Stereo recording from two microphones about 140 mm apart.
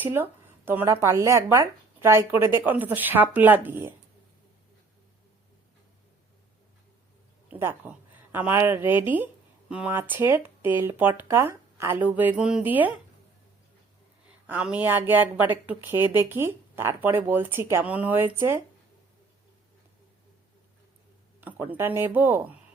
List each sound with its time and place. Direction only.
0.0 s speech: 15° right (ahead or behind)
7.5 s speech: 15° right (ahead or behind)
14.4 s speech: 10° right (ahead or behind)
21.4 s speech: 15° right (ahead or behind)